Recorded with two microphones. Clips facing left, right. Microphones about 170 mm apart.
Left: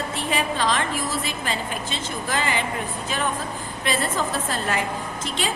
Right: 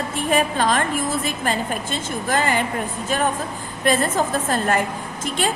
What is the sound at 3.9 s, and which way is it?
A woman's voice, 50° right (ahead or behind).